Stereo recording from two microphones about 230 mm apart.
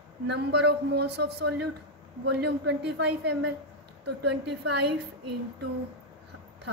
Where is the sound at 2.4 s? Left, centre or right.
Right.